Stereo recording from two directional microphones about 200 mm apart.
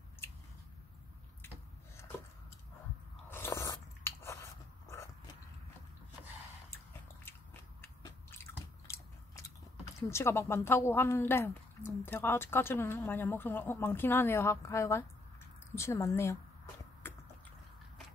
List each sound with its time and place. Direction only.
3.3 s biting: 10° left (ahead or behind)
7.8 s biting: 10° left (ahead or behind)
10.0 s speech: 15° left (ahead or behind)
17.0 s a sound: 10° left (ahead or behind)